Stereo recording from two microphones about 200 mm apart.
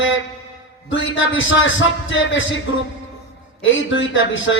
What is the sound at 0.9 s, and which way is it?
A man's voice, 75° left (ahead or behind).